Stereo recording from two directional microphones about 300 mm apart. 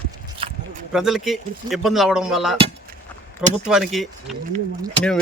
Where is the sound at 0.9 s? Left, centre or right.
Centre.